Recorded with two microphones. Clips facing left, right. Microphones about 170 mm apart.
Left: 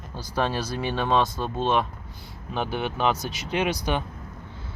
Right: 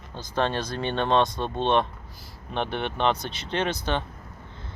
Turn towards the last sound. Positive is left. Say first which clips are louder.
# left 1 dB
turn(degrees=10)  # may be behind; listen again after turning